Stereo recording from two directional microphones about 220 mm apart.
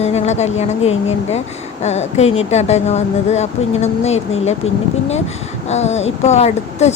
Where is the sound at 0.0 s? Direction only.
30° left (ahead or behind).